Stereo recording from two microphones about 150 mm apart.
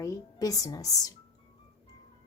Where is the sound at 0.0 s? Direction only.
20° left (ahead or behind).